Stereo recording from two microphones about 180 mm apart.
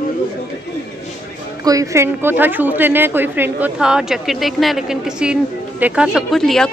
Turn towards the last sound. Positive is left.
turn(degrees=0)  # may be behind; listen again after turning